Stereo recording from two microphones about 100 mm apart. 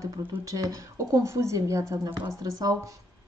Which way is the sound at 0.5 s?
35° right (ahead or behind).